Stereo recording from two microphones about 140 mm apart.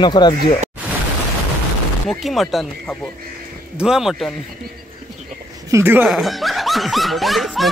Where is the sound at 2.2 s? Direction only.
Centre (ahead or behind).